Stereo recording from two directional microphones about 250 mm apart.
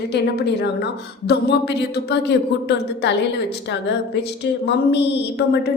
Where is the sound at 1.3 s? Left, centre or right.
Left.